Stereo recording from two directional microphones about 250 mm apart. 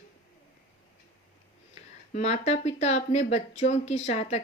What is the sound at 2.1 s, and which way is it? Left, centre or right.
Speech, left.